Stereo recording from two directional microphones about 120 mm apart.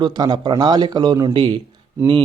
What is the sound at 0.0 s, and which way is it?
Speech, 35° right (ahead or behind).